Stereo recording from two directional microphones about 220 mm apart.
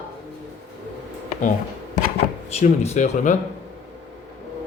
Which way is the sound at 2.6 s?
30° left (ahead or behind).